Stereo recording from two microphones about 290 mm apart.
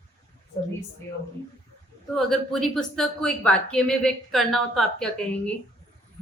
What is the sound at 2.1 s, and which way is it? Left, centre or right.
Speech, centre.